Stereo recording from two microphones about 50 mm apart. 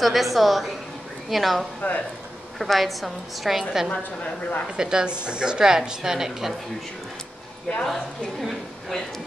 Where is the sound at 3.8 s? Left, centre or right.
Left.